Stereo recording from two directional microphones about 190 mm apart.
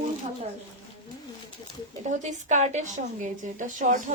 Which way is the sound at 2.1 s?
40° right (ahead or behind).